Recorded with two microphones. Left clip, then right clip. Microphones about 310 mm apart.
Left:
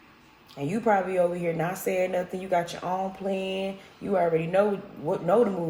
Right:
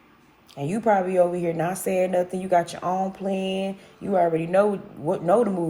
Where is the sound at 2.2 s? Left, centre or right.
Right.